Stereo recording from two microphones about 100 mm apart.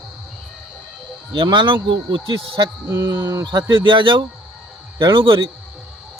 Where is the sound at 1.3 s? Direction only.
50° right (ahead or behind).